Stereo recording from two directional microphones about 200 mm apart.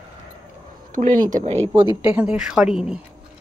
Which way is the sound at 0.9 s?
40° right (ahead or behind).